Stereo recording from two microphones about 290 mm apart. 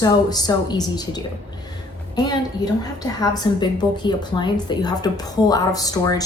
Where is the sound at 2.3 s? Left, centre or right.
Centre.